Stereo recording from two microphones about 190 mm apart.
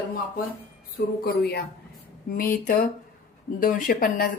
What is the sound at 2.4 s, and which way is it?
A woman's voice, 50° left (ahead or behind).